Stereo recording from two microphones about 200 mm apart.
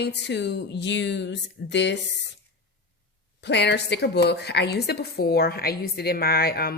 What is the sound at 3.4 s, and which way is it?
Speech, 60° left (ahead or behind).